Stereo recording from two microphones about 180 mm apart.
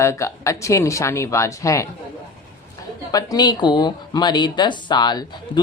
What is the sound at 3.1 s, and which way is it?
Speech, 20° left (ahead or behind).